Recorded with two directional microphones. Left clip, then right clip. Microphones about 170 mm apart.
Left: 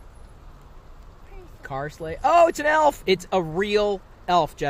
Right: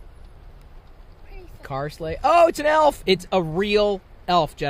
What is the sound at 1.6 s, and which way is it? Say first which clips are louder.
Speech: right 2 dB; 30° right (ahead or behind).